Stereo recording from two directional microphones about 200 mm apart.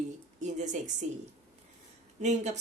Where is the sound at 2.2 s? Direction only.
35° right (ahead or behind).